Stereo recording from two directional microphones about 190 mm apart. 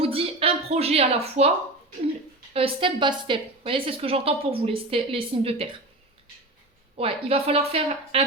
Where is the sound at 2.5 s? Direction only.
30° right (ahead or behind).